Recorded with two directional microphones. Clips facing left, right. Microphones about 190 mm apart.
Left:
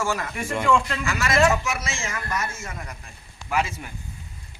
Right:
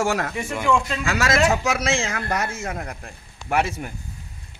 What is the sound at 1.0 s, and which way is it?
A man's voice, 85° right.